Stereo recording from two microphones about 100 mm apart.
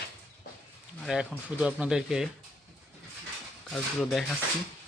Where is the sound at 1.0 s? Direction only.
5° right (ahead or behind).